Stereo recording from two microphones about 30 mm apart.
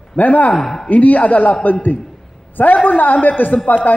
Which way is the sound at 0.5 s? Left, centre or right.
Centre.